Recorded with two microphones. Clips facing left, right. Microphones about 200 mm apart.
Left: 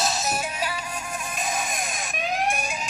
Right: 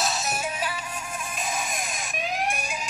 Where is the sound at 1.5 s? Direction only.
45° left (ahead or behind).